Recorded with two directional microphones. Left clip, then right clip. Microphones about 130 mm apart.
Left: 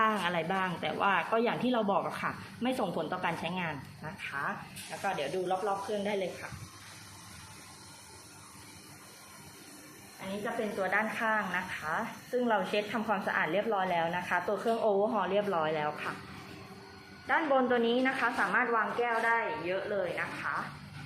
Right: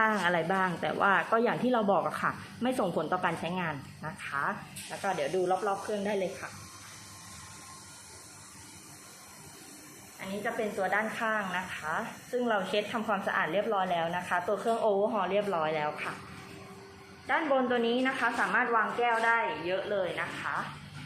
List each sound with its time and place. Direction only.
0.0 s speech: 30° right (ahead or behind)
10.8 s a woman's voice: 5° left (ahead or behind)
17.2 s a woman's voice: centre (ahead or behind)
18.7 s speech: 30° right (ahead or behind)